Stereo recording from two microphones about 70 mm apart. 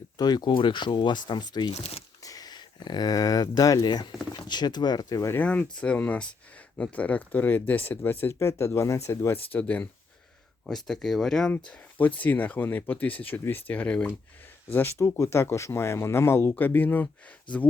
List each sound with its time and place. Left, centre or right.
0.2 s speech: left
2.2 s speech: left
5.4 s speech: left
9.3 s speech: left
10.7 s speech: centre
11.5 s speech: left
14.7 s speech: left
14.9 s speech: left